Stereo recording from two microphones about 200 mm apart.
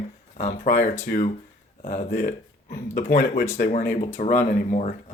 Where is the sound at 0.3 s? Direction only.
40° left (ahead or behind).